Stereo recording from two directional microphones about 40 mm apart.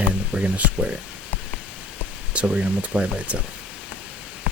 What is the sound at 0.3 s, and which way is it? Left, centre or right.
Speech, right.